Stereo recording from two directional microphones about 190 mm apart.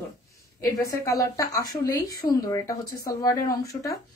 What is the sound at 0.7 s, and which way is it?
A woman's voice, 20° left (ahead or behind).